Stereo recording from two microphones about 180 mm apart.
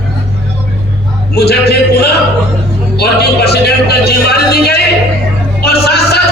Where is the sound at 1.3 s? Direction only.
65° left (ahead or behind).